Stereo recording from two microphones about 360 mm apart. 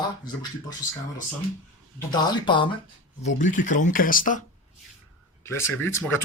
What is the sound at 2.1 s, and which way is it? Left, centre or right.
Speech, centre.